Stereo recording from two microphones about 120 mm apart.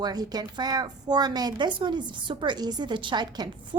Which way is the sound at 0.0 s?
35° right (ahead or behind).